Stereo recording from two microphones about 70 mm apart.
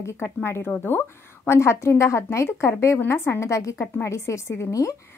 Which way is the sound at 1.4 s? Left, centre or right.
Left.